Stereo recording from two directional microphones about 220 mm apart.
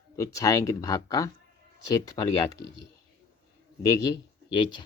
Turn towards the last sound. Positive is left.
turn(degrees=20)  # may be behind; listen again after turning